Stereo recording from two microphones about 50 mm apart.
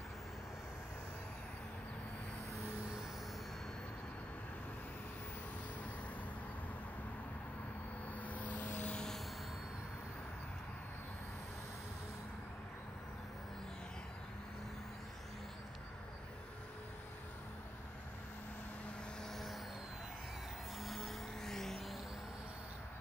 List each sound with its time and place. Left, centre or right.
8.1 s vehicle: left
19.3 s vehicle: centre
20.8 s vehicle: centre